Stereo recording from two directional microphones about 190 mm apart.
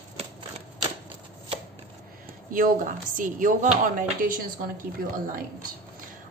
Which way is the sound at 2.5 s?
45° right (ahead or behind).